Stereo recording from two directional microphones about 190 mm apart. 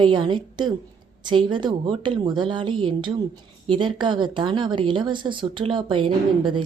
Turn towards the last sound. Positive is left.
turn(degrees=-25)  # may be behind; listen again after turning